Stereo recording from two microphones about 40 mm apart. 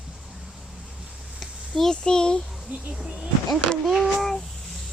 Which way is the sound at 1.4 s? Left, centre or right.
Centre.